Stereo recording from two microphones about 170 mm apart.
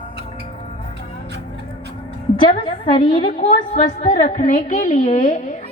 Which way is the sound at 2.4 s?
30° left (ahead or behind).